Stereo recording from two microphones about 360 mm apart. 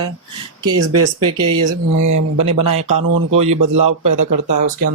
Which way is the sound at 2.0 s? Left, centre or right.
Right.